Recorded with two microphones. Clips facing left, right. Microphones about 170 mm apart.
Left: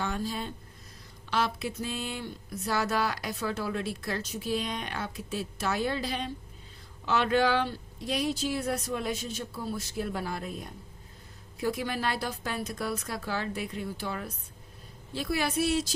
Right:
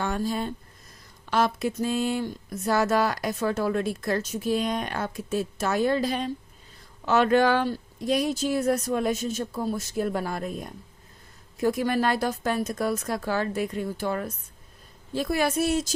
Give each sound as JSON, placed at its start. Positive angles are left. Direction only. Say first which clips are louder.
{"t": 0.0, "sound": "speech", "louder": "right 5 dB", "side_deg": -50}